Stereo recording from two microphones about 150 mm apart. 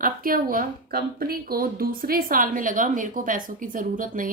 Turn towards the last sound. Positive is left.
turn(degrees=-65)  # may be behind; listen again after turning